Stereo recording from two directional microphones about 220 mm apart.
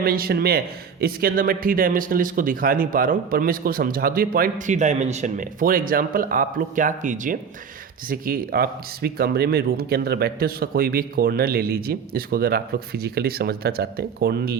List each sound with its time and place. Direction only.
0.0 s speech: 45° right (ahead or behind)